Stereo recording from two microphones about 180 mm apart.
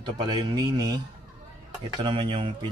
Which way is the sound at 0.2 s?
25° right (ahead or behind).